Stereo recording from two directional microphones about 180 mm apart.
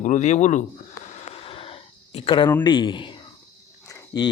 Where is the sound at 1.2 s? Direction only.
35° left (ahead or behind).